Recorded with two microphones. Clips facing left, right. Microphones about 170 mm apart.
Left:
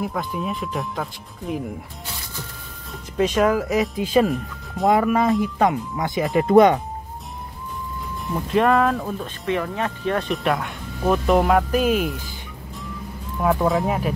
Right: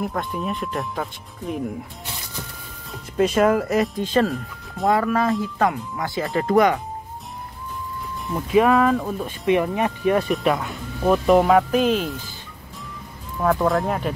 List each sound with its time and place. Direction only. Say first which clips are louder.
0.0 s speech: even; centre (ahead or behind)
2.9 s speech: right 1 dB; centre (ahead or behind); by 6.8 s 25° left (ahead or behind)
8.3 s speech: right 1 dB; 5° right (ahead or behind)
9.5 s speech: right 4 dB; 15° right (ahead or behind)
10.3 s speech: right 2 dB; centre (ahead or behind)
13.4 s speech: even; 5° left (ahead or behind)